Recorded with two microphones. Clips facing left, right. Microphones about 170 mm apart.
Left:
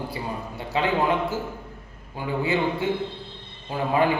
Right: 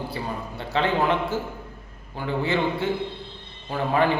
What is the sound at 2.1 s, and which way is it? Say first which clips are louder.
A man's voice: even; 15° left (ahead or behind).